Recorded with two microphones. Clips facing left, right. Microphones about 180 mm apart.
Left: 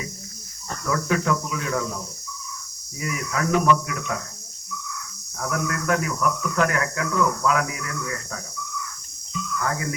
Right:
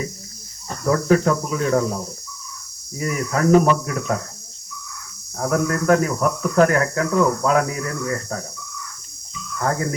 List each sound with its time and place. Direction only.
0.9 s speech: 40° right (ahead or behind)
3.0 s speech: 40° right (ahead or behind)
5.4 s speech: 40° right (ahead or behind)
9.6 s speech: 40° right (ahead or behind)